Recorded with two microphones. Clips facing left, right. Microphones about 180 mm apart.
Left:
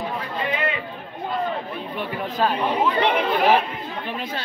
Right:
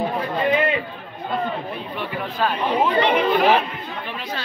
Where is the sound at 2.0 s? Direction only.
40° left (ahead or behind).